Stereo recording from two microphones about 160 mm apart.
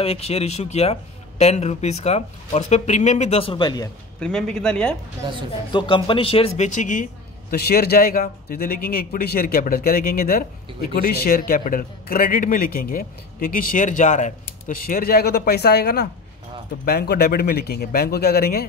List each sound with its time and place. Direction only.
0.0 s speech: 40° left (ahead or behind)
4.2 s a man's voice: 5° left (ahead or behind)
5.7 s speech: 30° left (ahead or behind); by 7.1 s 55° left (ahead or behind)
7.5 s a man's voice: 75° left (ahead or behind)